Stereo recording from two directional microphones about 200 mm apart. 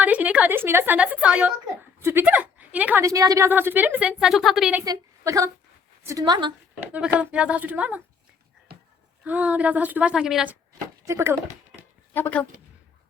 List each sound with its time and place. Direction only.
0.0 s a woman's voice: 10° right (ahead or behind)
4.9 s a woman's voice: 15° right (ahead or behind)
6.9 s a woman's voice: 5° right (ahead or behind)
9.2 s a woman's voice: 5° right (ahead or behind)
12.1 s speech: 10° left (ahead or behind)